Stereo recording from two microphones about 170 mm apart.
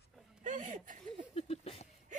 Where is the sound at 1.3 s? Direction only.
35° left (ahead or behind).